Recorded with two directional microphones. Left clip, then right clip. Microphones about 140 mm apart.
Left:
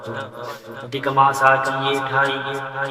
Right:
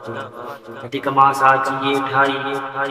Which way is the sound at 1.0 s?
25° right (ahead or behind).